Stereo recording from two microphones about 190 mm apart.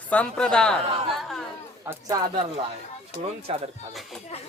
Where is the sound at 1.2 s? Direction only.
Centre (ahead or behind).